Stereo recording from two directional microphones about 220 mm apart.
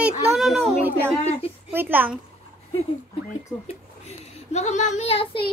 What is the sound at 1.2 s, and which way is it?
Speech, 30° left (ahead or behind).